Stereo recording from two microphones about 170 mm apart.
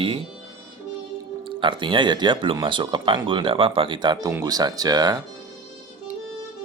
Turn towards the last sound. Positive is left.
turn(degrees=-25)  # may be behind; listen again after turning